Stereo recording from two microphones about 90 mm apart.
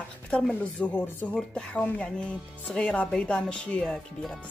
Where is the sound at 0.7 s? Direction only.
20° left (ahead or behind).